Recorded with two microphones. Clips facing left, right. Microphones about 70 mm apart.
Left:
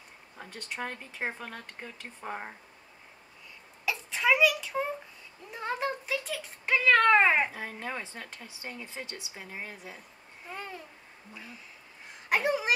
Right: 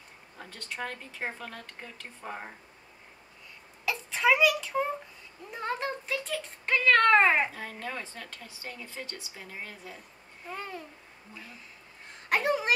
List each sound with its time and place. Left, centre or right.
0.5 s speech: centre
3.8 s a sound: centre
5.5 s cat: centre
7.5 s speech: centre
10.5 s a child's voice: centre
12.3 s a sound: centre